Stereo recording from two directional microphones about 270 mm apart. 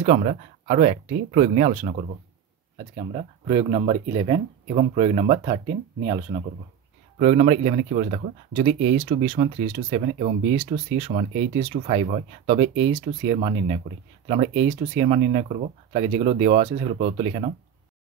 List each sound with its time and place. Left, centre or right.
0.0 s speech: right